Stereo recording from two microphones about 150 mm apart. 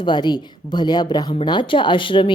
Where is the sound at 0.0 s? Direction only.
30° left (ahead or behind).